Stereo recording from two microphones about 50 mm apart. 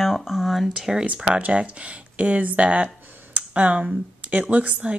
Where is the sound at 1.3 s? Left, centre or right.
Right.